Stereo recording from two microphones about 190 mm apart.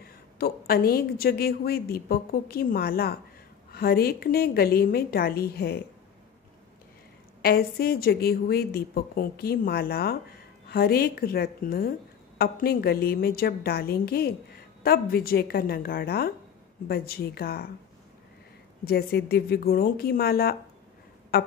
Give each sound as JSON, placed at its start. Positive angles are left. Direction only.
{"t": 0.4, "sound": "a woman's voice", "side_deg": 55}
{"t": 7.4, "sound": "a woman's voice", "side_deg": 55}
{"t": 18.9, "sound": "a woman's voice", "side_deg": 55}